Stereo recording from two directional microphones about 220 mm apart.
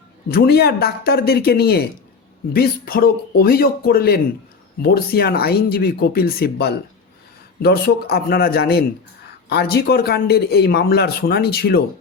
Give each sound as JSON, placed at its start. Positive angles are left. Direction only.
{"t": 0.3, "sound": "speech", "side_deg": 45}